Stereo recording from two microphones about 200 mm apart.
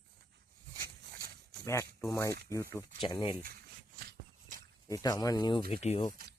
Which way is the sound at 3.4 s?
50° right (ahead or behind).